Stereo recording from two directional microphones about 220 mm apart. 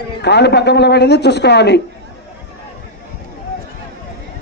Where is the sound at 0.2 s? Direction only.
50° left (ahead or behind).